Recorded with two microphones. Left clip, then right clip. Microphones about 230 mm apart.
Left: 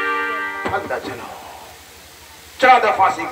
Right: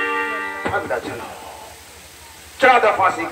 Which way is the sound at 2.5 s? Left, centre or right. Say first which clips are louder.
Left 1 dB; left.